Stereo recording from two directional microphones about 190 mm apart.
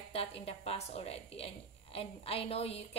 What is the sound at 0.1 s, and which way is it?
Speech, 30° left (ahead or behind).